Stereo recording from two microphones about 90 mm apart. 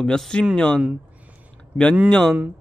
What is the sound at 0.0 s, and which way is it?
Speech, 5° left (ahead or behind).